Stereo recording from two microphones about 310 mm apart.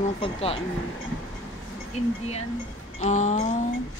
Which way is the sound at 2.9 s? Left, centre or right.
Left.